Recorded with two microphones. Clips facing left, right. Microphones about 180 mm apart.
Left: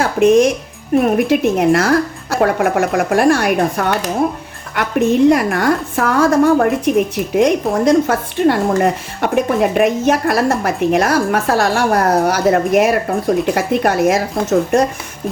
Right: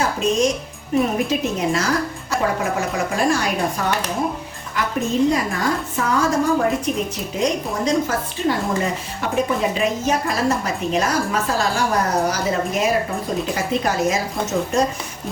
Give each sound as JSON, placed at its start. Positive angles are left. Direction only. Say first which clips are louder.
{"t": 0.0, "sound": "a woman's voice", "louder": "left 8 dB", "side_deg": 60}